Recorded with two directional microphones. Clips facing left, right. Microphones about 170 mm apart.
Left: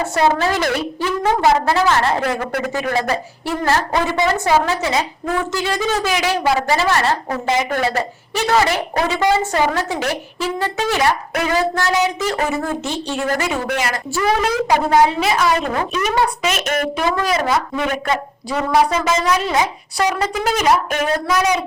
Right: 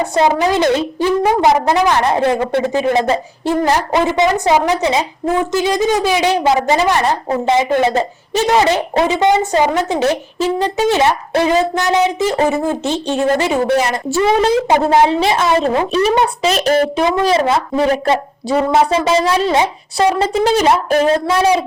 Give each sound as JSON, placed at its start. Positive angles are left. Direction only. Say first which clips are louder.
{"t": 0.0, "sound": "a woman's voice", "louder": "right 3 dB", "side_deg": -15}
{"t": 13.6, "sound": "a woman's voice", "louder": "right 7 dB", "side_deg": -35}